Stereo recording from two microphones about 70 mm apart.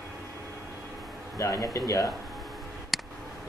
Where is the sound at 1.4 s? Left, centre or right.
Left.